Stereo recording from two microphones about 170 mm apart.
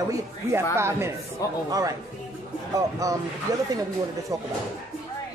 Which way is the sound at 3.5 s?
20° right (ahead or behind).